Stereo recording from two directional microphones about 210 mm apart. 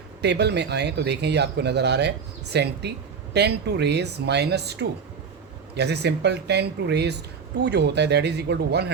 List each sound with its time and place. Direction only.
0.2 s speech: 55° right (ahead or behind)